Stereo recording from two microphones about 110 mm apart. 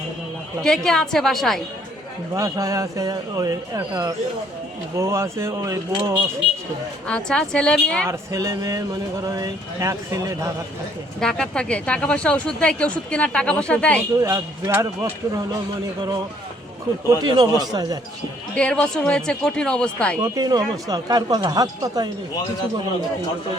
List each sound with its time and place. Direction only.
0.6 s a woman's voice: 5° left (ahead or behind)
2.3 s speech: 30° right (ahead or behind)
7.1 s speech: 10° left (ahead or behind)
8.0 s speech: 30° right (ahead or behind)
11.2 s speech: 5° left (ahead or behind)
14.2 s speech: 30° right (ahead or behind)
17.2 s speech: 40° right (ahead or behind)
18.5 s speech: 10° left (ahead or behind)
20.2 s speech: 35° right (ahead or behind)